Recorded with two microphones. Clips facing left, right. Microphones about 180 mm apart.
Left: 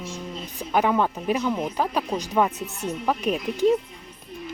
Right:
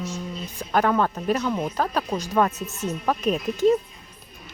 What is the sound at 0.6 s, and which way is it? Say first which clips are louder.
Speech: even; 10° left (ahead or behind).